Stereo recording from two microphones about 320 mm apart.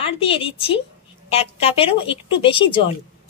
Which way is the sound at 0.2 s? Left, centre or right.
Centre.